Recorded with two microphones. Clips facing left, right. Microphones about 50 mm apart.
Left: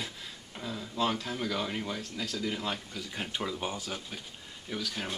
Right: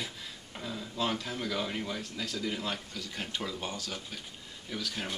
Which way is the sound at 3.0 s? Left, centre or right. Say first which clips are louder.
Left 2 dB; centre.